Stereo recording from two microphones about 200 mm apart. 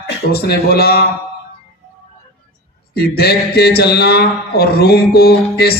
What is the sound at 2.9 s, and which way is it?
A man's voice, 50° left (ahead or behind).